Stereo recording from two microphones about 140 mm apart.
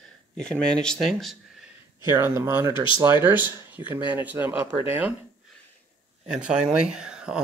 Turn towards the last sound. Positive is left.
turn(degrees=-5)  # may be behind; listen again after turning